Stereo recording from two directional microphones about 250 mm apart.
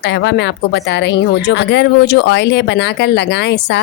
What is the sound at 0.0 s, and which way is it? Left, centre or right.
Speech, left.